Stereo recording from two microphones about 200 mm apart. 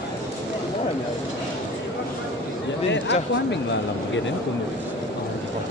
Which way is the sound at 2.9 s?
60° left (ahead or behind).